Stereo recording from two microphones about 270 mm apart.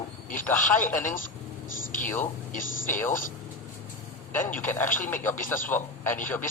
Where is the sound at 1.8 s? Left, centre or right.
Left.